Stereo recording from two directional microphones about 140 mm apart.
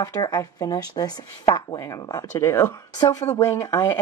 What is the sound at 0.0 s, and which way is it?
Speech, 30° left (ahead or behind).